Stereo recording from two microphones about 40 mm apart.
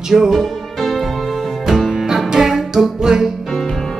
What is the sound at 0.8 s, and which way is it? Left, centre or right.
Music, centre.